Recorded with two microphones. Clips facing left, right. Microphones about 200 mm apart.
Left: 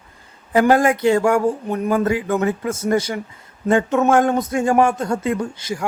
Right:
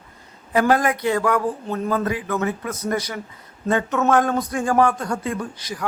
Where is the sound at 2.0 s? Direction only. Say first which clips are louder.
Left 4 dB; 30° left (ahead or behind).